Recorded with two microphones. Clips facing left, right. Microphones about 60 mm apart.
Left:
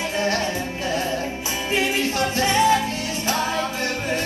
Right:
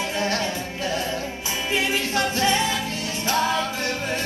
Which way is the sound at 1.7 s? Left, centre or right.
Left.